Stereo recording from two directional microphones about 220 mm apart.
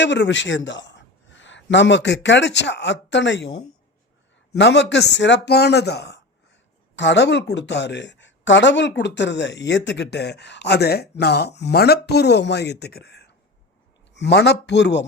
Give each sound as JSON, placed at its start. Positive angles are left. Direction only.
{"t": 0.0, "sound": "a man's voice", "side_deg": 55}